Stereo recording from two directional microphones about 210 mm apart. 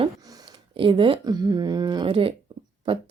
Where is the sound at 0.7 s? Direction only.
25° right (ahead or behind).